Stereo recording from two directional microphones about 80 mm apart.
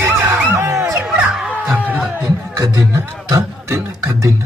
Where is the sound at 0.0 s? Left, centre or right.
Right.